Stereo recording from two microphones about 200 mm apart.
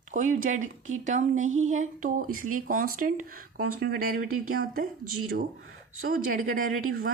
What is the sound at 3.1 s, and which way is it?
Speech, 90° right.